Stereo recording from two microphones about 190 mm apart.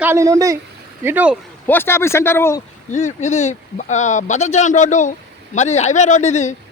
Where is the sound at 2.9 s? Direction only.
40° left (ahead or behind).